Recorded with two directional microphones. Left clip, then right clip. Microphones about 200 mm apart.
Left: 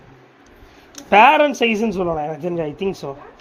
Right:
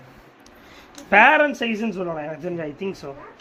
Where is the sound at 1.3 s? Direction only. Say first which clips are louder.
Left 3 dB; centre (ahead or behind).